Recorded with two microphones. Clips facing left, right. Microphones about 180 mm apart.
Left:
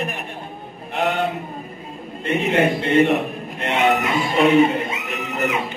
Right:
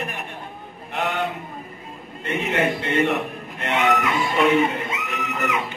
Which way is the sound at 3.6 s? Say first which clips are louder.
Left 2 dB; 30° left (ahead or behind).